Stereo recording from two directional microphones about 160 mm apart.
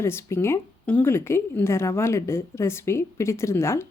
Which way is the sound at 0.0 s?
15° left (ahead or behind).